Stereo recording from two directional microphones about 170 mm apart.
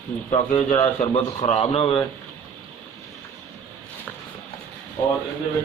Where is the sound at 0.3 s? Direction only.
35° left (ahead or behind).